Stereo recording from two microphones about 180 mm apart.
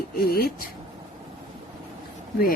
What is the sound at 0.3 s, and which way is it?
Speech, 55° left (ahead or behind).